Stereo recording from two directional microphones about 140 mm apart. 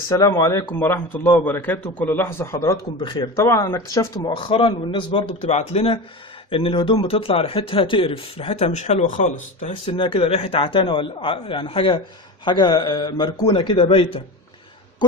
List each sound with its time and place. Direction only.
0.1 s a man's voice: 20° left (ahead or behind)
3.0 s speech: 30° left (ahead or behind)
4.3 s a man's voice: 40° left (ahead or behind)
5.5 s speech: 50° left (ahead or behind)
10.0 s a man's voice: 40° left (ahead or behind)